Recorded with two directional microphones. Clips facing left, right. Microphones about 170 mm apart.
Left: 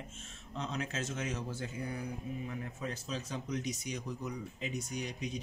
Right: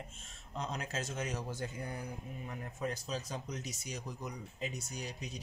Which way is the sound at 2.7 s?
40° right (ahead or behind).